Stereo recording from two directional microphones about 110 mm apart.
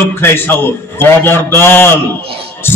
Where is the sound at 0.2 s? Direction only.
20° left (ahead or behind).